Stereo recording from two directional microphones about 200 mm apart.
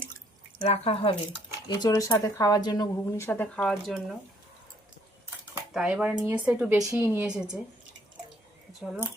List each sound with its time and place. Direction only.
0.6 s speech: 30° left (ahead or behind)
1.6 s speech: 20° left (ahead or behind); by 4.2 s centre (ahead or behind)
5.7 s a woman's voice: 5° right (ahead or behind)
8.8 s speech: 5° right (ahead or behind)